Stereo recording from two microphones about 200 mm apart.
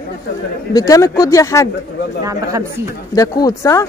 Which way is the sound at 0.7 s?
15° left (ahead or behind).